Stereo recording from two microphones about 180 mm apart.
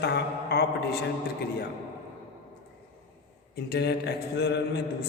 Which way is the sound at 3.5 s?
65° left (ahead or behind).